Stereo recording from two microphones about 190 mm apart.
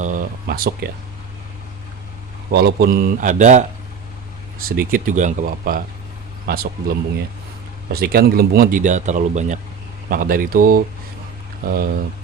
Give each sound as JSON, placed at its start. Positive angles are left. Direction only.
{"t": 0.0, "sound": "speech", "side_deg": -45}
{"t": 2.5, "sound": "speech", "side_deg": -60}
{"t": 4.6, "sound": "speech", "side_deg": -50}
{"t": 7.9, "sound": "speech", "side_deg": -55}